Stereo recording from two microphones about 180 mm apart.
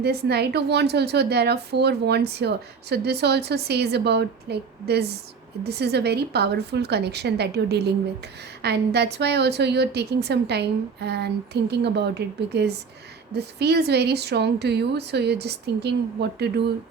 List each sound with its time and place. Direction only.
0.0 s a woman's voice: 65° right (ahead or behind)